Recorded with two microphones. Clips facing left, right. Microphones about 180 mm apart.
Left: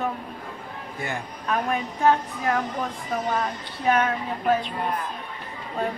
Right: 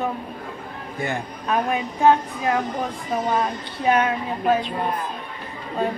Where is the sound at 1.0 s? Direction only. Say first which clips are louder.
Right 5 dB; 20° right (ahead or behind).